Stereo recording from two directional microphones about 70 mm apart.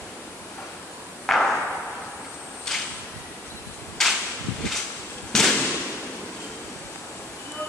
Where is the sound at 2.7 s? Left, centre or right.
Centre.